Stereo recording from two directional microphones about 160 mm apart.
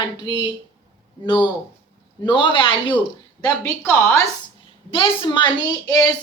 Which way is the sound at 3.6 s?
15° left (ahead or behind).